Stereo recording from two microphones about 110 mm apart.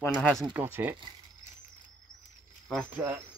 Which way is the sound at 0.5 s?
20° right (ahead or behind).